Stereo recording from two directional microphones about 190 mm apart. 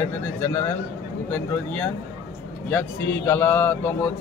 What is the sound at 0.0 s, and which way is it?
Speech, 15° left (ahead or behind).